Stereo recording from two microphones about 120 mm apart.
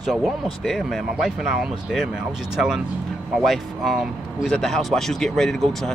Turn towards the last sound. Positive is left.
turn(degrees=5)  # may be behind; listen again after turning